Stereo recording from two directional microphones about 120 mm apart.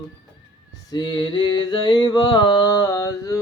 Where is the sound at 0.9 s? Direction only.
40° left (ahead or behind).